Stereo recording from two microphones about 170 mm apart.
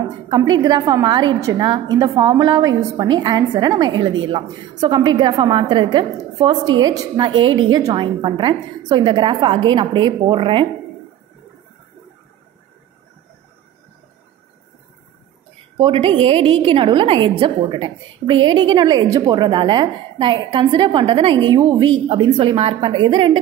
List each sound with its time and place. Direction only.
0.4 s a woman's voice: 25° right (ahead or behind)
15.8 s a woman's voice: 30° right (ahead or behind)